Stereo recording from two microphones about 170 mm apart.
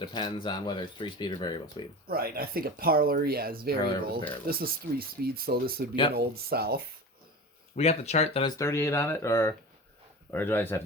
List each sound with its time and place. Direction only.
0.0 s speech: 25° left (ahead or behind)
2.0 s speech: 60° right (ahead or behind)
7.8 s speech: 40° left (ahead or behind)
8.5 s speech: 15° left (ahead or behind)